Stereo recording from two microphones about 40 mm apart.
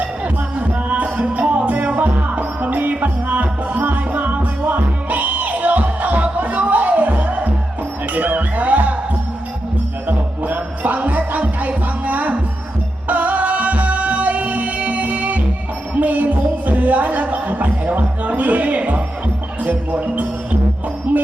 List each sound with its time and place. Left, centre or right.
0.7 s music: right
10.1 s music: right